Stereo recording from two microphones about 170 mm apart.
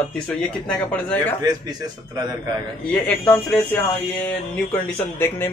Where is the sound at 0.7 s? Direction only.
10° left (ahead or behind).